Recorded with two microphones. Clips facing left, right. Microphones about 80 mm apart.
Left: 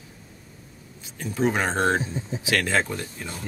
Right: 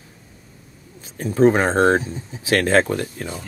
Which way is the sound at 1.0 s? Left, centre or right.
Right.